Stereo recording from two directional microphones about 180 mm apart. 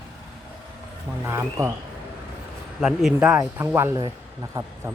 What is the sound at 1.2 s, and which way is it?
Speech, 15° right (ahead or behind).